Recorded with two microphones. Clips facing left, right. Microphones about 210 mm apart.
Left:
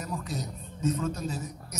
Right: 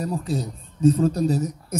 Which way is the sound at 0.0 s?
35° right (ahead or behind).